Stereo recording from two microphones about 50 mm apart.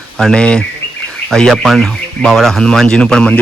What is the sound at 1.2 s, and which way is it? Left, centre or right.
Speech, centre.